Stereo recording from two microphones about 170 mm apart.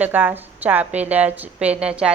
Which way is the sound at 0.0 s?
10° right (ahead or behind).